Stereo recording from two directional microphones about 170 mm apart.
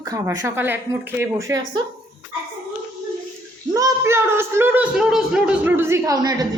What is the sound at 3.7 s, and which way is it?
A man's voice, 20° right (ahead or behind).